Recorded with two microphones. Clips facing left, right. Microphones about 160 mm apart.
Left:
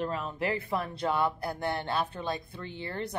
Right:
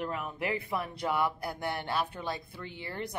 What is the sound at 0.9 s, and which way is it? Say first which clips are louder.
Speech: left 1 dB; 25° left (ahead or behind).